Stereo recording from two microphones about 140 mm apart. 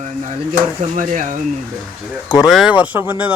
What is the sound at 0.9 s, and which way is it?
Speech, 70° right (ahead or behind).